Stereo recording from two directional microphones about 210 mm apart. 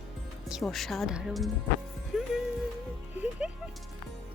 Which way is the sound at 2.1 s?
5° right (ahead or behind).